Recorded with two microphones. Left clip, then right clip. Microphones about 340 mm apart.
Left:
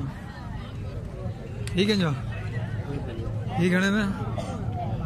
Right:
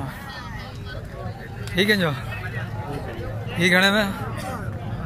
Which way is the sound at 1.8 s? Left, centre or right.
Centre.